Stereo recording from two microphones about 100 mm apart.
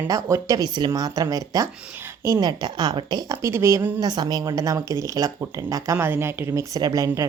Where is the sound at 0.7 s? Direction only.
45° right (ahead or behind).